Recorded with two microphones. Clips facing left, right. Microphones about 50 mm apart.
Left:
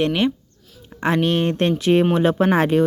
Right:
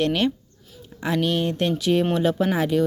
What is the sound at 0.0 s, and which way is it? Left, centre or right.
Speech, centre.